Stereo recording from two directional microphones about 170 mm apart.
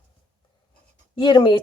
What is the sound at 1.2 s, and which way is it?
Speech, 25° left (ahead or behind).